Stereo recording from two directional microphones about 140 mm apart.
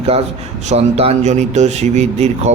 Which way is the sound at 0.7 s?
45° right (ahead or behind).